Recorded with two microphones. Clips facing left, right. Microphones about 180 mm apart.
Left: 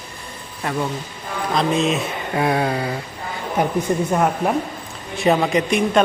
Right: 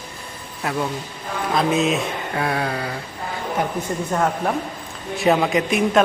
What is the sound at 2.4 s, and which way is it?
Mantra, 25° left (ahead or behind).